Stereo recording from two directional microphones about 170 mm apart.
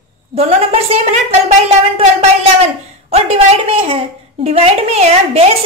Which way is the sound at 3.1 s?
40° right (ahead or behind).